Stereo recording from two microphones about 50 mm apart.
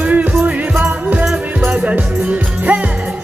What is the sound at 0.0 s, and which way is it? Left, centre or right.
Music, right.